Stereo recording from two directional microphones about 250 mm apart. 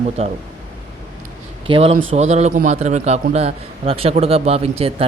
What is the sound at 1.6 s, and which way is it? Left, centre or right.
Speech, right.